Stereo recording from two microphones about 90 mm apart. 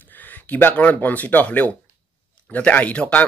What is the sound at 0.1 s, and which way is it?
Speech, 20° left (ahead or behind).